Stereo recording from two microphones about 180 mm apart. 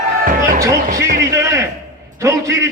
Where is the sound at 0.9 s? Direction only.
65° right (ahead or behind).